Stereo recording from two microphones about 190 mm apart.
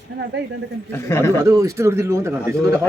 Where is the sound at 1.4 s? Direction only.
15° right (ahead or behind).